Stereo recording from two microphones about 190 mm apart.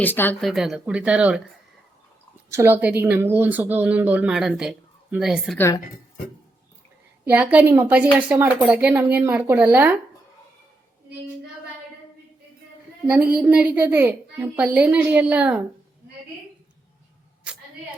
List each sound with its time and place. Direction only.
0.0 s speech: 10° left (ahead or behind)
0.5 s speech: centre (ahead or behind)
2.5 s a woman's voice: 15° right (ahead or behind)
5.5 s speech: 15° left (ahead or behind)
7.3 s a woman's voice: 10° right (ahead or behind)
13.3 s a woman's voice: 5° right (ahead or behind)